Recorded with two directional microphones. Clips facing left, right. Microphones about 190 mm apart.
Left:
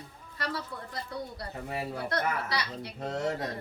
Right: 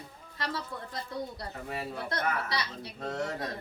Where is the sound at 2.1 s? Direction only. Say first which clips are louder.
Left 1 dB; 20° right (ahead or behind).